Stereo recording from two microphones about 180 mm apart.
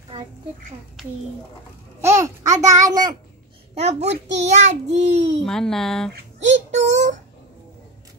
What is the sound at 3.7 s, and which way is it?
A child's voice, 40° right (ahead or behind).